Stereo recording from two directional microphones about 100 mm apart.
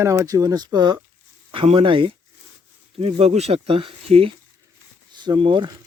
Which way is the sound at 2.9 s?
85° right.